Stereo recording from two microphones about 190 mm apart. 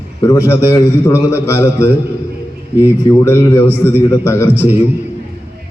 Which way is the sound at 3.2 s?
15° left (ahead or behind).